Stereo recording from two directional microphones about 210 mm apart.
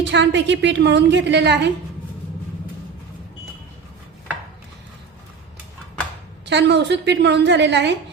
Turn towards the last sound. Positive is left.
turn(degrees=-55)  # may be behind; listen again after turning